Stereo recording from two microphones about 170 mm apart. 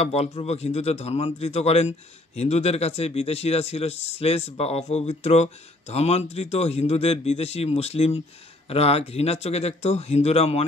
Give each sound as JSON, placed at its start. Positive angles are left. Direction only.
{"t": 0.0, "sound": "speech", "side_deg": 40}